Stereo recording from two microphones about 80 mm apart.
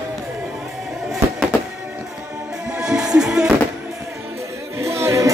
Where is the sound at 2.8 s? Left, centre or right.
Centre.